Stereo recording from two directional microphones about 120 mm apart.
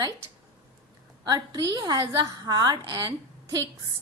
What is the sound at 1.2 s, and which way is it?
A woman's voice, 35° right (ahead or behind).